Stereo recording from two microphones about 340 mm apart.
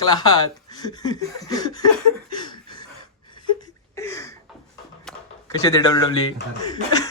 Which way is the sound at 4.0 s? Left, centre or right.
Centre.